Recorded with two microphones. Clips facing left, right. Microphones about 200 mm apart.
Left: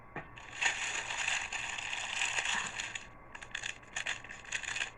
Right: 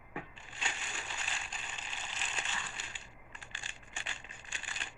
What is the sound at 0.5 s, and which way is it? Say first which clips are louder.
Crushing: right 1 dB; 45° right (ahead or behind).